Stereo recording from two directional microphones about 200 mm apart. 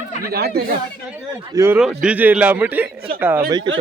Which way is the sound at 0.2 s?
50° right (ahead or behind).